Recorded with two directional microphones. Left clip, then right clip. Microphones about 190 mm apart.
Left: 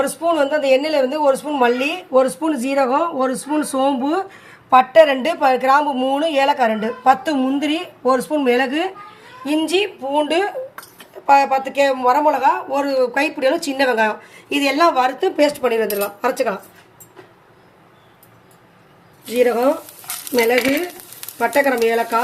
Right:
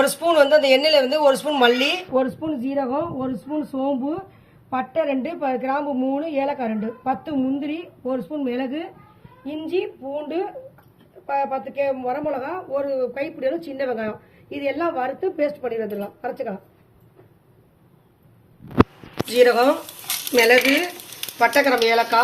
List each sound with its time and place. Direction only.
0.0 s a man's voice: 25° left (ahead or behind); by 16.6 s 50° left (ahead or behind)
19.3 s speech: 35° left (ahead or behind)